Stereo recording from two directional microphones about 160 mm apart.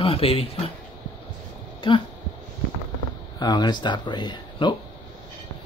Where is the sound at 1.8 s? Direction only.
30° left (ahead or behind).